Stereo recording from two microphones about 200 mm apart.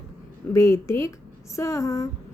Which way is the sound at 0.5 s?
15° left (ahead or behind).